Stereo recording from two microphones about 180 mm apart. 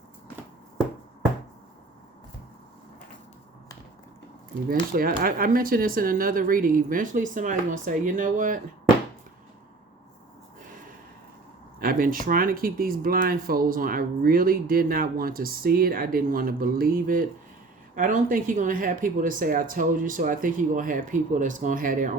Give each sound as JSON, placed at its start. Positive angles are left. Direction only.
{"t": 4.9, "sound": "speech", "side_deg": -55}
{"t": 11.8, "sound": "speech", "side_deg": -50}